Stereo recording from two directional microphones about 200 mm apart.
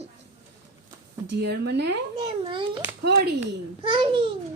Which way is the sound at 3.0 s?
55° right (ahead or behind).